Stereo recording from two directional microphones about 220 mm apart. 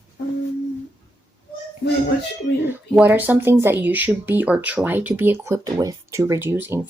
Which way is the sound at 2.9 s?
5° right (ahead or behind).